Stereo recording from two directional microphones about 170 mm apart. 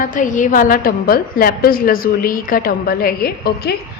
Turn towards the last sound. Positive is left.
turn(degrees=70)  # may be behind; listen again after turning